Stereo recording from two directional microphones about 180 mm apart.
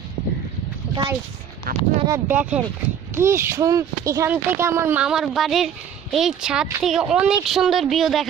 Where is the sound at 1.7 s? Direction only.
55° right (ahead or behind).